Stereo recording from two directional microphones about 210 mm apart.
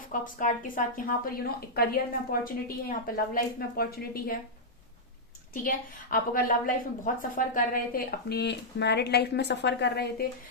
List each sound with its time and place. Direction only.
0.1 s a woman's voice: 40° left (ahead or behind)
5.6 s a woman's voice: 40° left (ahead or behind)